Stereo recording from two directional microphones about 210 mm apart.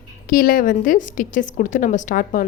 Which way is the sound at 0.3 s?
40° left (ahead or behind).